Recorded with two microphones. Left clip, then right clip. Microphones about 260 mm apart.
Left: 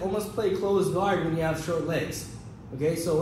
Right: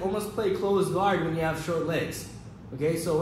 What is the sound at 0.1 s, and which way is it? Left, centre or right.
A man's voice, centre.